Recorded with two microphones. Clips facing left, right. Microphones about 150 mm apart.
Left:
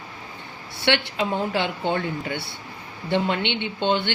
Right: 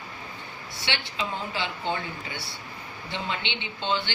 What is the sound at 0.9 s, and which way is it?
A woman's voice, 60° left (ahead or behind).